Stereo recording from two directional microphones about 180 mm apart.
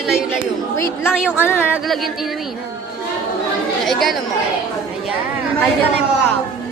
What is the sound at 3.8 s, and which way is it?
Chatter, centre (ahead or behind).